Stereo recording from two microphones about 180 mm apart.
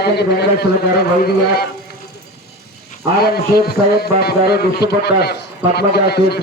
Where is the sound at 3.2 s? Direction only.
60° left (ahead or behind).